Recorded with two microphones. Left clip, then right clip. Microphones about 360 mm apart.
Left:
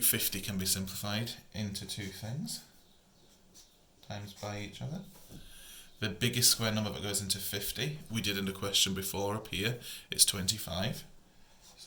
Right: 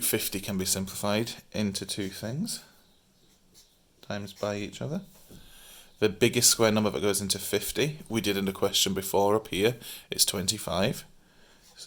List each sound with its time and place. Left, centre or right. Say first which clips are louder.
0.0 s speech: right 4 dB; centre
4.1 s speech: right 10 dB; centre